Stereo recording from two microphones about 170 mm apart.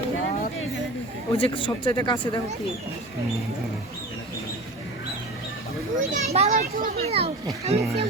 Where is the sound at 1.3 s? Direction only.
30° left (ahead or behind).